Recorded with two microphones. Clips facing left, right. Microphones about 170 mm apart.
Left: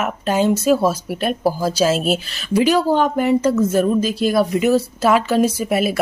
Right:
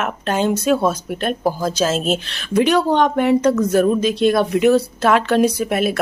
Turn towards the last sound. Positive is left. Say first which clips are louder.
# even
turn(degrees=5)  # may be behind; listen again after turning